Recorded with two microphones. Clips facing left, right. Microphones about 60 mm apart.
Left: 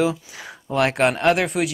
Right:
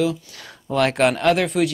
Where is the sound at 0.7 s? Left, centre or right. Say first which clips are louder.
Right 1 dB; centre.